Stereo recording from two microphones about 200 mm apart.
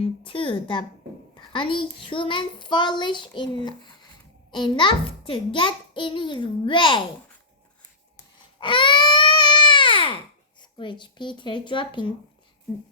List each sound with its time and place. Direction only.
0.0 s a child's voice: 25° left (ahead or behind)
8.6 s baby cry: 25° left (ahead or behind)
10.6 s a child's voice: 25° left (ahead or behind)